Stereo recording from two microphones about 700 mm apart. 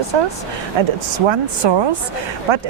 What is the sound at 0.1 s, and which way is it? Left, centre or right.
Speech, right.